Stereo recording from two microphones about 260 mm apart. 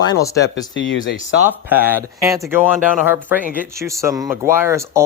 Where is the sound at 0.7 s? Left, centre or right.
Left.